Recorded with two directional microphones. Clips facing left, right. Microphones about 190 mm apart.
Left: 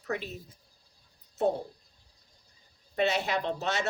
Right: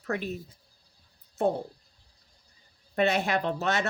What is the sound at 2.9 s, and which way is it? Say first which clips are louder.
Speech: right 3 dB; 55° right (ahead or behind).